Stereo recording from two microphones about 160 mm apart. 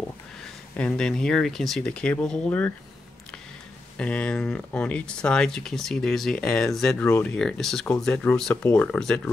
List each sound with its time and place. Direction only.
0.7 s speech: 5° left (ahead or behind)
4.0 s speech: 5° left (ahead or behind)
7.1 s speech: 15° left (ahead or behind)
7.3 s speech: 5° left (ahead or behind)